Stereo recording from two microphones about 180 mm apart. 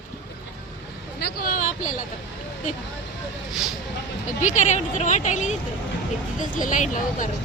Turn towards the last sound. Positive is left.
turn(degrees=45)  # may be behind; listen again after turning